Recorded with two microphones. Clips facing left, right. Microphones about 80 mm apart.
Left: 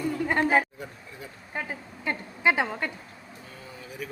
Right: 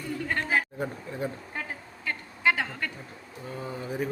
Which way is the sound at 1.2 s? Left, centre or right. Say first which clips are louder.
Right 13 dB; right.